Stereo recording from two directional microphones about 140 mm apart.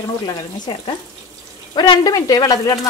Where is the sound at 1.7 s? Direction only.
30° left (ahead or behind).